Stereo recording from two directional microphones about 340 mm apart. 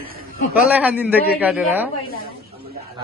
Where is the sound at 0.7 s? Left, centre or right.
Centre.